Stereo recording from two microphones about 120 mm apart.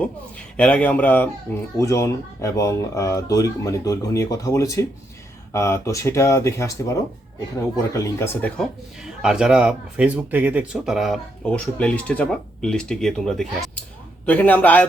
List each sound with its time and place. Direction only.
0.0 s a man's voice: 10° left (ahead or behind)
1.8 s speech: 25° left (ahead or behind)
9.2 s speech: 5° right (ahead or behind)
11.4 s speech: 10° left (ahead or behind)